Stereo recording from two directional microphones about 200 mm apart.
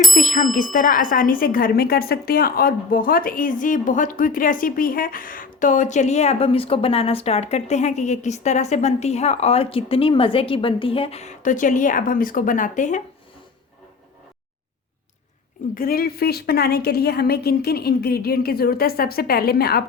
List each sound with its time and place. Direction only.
0.1 s speech: 40° left (ahead or behind)
15.7 s a woman's voice: 45° left (ahead or behind)